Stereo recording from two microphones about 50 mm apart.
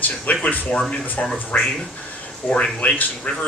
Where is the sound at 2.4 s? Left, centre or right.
Left.